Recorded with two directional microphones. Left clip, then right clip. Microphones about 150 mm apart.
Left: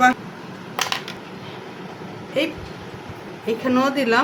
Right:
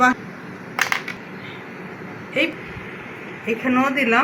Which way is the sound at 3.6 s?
30° left (ahead or behind).